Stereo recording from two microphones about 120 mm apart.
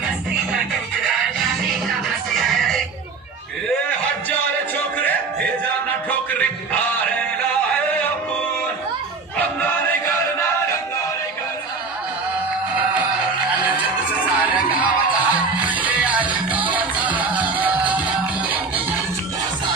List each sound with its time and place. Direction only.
2.0 s music: centre (ahead or behind)
4.9 s music: 15° left (ahead or behind)
10.0 s music: 20° left (ahead or behind)
14.4 s music: 10° right (ahead or behind)